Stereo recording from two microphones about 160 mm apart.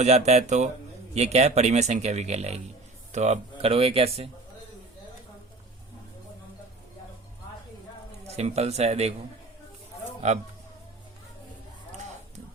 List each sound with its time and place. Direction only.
0.0 s speech: 45° right (ahead or behind)
8.3 s speech: 40° right (ahead or behind)